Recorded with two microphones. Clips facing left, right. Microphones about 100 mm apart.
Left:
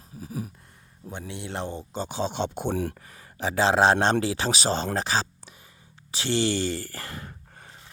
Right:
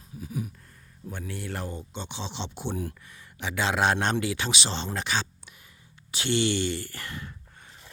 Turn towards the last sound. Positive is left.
turn(degrees=40)  # may be behind; listen again after turning